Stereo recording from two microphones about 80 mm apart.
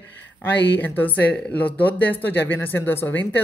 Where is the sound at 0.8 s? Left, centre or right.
Left.